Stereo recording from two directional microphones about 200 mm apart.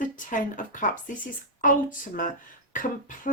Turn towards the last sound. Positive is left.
turn(degrees=40)  # may be behind; listen again after turning